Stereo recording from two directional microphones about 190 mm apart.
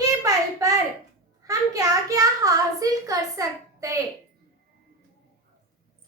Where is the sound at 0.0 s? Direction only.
15° right (ahead or behind).